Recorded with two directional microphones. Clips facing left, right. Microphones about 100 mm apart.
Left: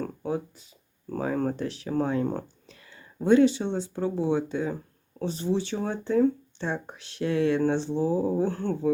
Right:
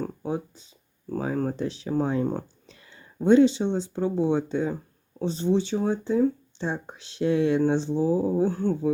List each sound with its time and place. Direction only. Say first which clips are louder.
0.3 s speech: left 2 dB; 25° right (ahead or behind)
1.1 s a sound: even; 5° right (ahead or behind)
1.5 s speech: right 1 dB; 20° right (ahead or behind)